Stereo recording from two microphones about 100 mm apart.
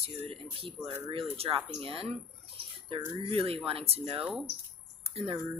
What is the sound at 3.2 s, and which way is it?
Speech, 70° right (ahead or behind).